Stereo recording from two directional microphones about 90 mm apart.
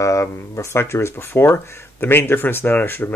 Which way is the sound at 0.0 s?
35° left (ahead or behind).